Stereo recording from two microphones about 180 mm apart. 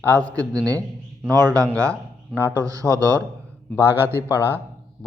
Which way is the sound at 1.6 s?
5° left (ahead or behind).